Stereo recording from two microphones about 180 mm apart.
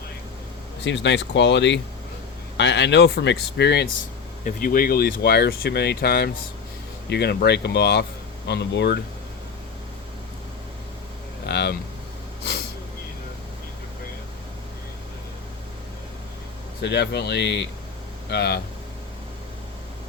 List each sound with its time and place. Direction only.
0.9 s speech: 80° left
4.4 s speech: 50° left (ahead or behind); by 9.0 s 65° left (ahead or behind)
11.4 s speech: 65° left (ahead or behind)
16.8 s speech: 70° left (ahead or behind)